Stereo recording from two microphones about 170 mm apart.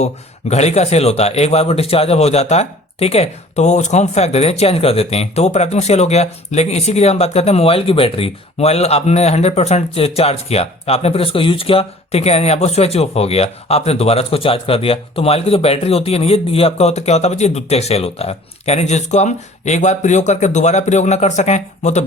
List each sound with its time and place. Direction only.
0.5 s a man's voice: 40° left (ahead or behind)